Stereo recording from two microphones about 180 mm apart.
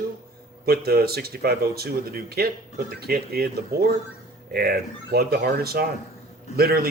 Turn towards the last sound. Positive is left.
turn(degrees=-60)  # may be behind; listen again after turning